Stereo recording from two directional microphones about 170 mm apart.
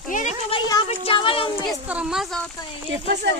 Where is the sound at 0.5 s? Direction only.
30° left (ahead or behind).